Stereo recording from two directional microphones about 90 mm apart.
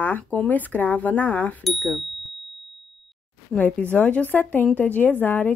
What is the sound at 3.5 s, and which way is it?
Speech, 15° left (ahead or behind).